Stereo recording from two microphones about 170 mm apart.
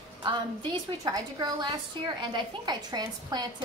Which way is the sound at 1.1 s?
20° right (ahead or behind).